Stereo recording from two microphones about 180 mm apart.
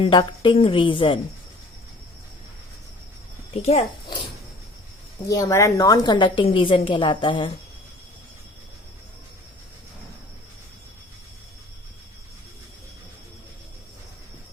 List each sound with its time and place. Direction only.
0.1 s a woman's voice: 25° left (ahead or behind)
3.5 s a child's voice: 35° left (ahead or behind)
5.3 s a woman's voice: 15° left (ahead or behind)